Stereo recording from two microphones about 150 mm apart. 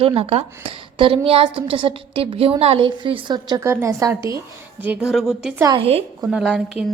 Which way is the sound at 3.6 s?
20° right (ahead or behind).